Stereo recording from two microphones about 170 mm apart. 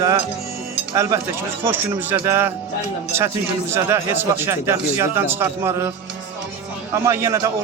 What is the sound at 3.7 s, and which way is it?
Speech, 15° right (ahead or behind).